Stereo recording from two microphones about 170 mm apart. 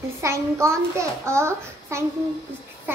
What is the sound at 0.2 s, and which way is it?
A child's voice, 15° right (ahead or behind).